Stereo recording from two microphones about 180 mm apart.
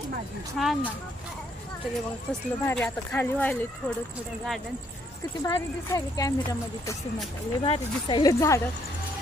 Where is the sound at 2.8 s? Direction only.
5° left (ahead or behind).